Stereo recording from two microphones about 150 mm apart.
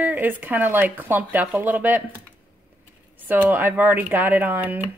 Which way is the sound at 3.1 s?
10° right (ahead or behind).